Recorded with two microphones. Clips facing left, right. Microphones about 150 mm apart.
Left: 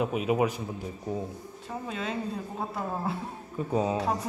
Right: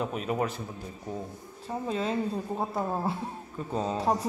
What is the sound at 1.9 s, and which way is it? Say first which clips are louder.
Speech: right 5 dB; 35° right (ahead or behind).